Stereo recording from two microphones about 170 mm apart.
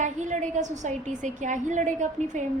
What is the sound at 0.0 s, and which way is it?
A woman's voice, 45° right (ahead or behind).